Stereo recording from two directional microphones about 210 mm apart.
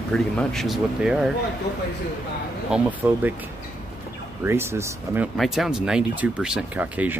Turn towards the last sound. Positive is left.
turn(degrees=-5)  # may be behind; listen again after turning